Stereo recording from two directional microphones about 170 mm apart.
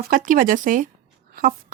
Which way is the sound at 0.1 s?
50° right (ahead or behind).